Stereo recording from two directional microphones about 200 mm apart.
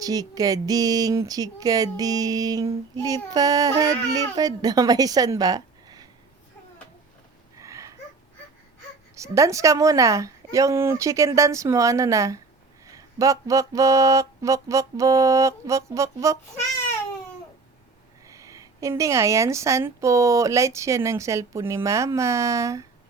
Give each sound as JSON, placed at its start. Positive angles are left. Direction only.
{"t": 0.0, "sound": "a woman's voice", "side_deg": -20}
{"t": 7.6, "sound": "a sound", "side_deg": -15}
{"t": 9.1, "sound": "a woman's voice", "side_deg": -15}
{"t": 18.3, "sound": "a woman's voice", "side_deg": -15}